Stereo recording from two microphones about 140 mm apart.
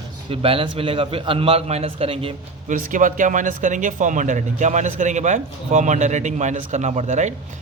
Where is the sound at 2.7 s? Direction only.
70° right (ahead or behind).